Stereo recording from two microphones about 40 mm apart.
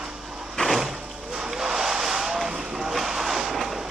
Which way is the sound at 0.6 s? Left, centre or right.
Centre.